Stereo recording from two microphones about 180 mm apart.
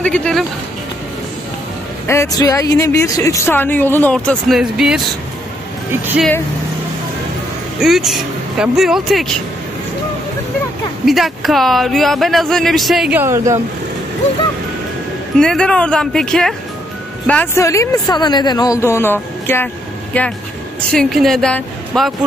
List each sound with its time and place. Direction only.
0.0 s speech: 5° left (ahead or behind)
2.0 s speech: 15° left (ahead or behind); by 5.1 s centre (ahead or behind)
7.8 s speech: centre (ahead or behind)
11.1 s speech: centre (ahead or behind)
13.2 s speech: 15° right (ahead or behind)
15.3 s speech: 5° left (ahead or behind)